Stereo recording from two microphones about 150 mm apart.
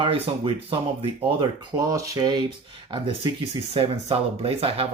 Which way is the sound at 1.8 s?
20° right (ahead or behind).